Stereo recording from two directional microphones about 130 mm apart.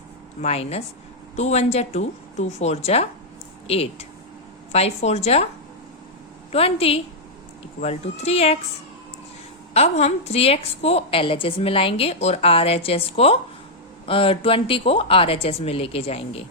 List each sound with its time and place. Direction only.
0.4 s a woman's voice: 50° left (ahead or behind)
6.5 s a woman's voice: 45° left (ahead or behind)
7.8 s a woman's voice: 60° left (ahead or behind)
9.7 s a woman's voice: 55° left (ahead or behind)